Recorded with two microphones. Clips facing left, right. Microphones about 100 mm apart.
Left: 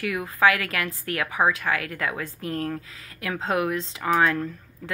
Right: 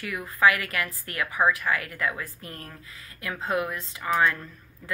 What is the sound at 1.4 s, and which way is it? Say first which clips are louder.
Speech: left 1 dB; 25° left (ahead or behind).